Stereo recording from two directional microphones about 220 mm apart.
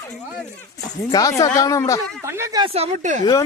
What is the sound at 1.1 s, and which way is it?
Speech, 15° left (ahead or behind).